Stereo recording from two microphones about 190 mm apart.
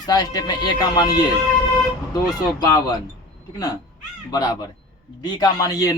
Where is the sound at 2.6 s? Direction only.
20° left (ahead or behind).